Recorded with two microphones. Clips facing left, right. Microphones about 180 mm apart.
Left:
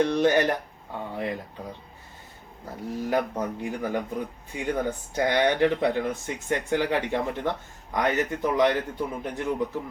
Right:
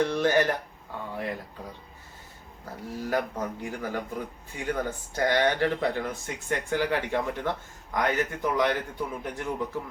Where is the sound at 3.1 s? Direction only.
20° left (ahead or behind).